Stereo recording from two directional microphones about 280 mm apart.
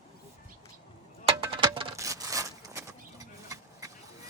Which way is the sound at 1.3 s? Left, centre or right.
Centre.